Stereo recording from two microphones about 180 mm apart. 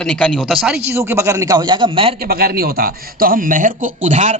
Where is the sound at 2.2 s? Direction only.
55° right (ahead or behind).